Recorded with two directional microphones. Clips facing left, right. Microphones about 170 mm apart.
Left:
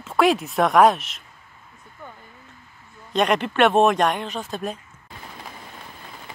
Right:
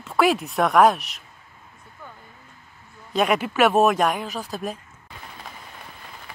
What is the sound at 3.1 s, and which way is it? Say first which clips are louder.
Speech: left 1 dB; 5° right (ahead or behind).